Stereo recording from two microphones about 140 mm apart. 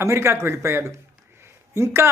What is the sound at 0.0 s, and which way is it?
A woman's voice, 20° right (ahead or behind).